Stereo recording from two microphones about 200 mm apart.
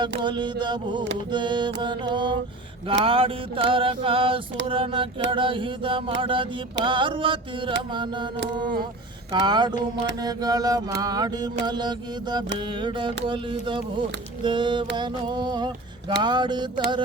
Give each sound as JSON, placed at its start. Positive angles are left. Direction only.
{"t": 0.2, "sound": "mantra", "side_deg": -25}
{"t": 9.3, "sound": "mantra", "side_deg": -20}